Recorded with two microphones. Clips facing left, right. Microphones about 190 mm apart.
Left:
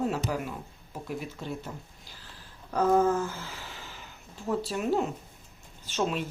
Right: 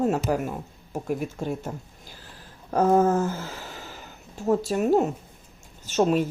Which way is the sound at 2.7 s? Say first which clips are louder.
Right 4 dB; 45° right (ahead or behind).